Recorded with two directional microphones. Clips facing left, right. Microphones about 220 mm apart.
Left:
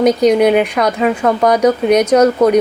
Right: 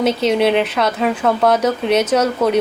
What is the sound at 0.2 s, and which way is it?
A woman's voice, 15° left (ahead or behind).